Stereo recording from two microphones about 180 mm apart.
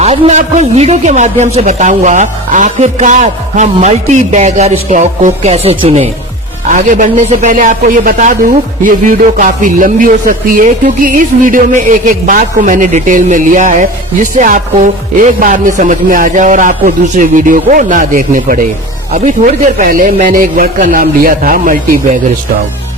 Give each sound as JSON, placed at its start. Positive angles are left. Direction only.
{"t": 0.0, "sound": "a man's voice", "side_deg": -35}